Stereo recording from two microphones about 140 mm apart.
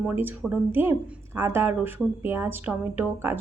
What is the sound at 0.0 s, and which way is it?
Speech, 15° right (ahead or behind).